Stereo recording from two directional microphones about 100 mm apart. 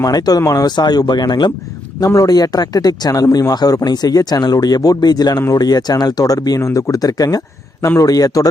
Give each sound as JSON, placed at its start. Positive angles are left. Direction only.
{"t": 0.0, "sound": "speech", "side_deg": 40}